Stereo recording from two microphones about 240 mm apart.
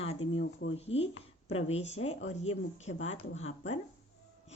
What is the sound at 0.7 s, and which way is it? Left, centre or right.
Speech, left.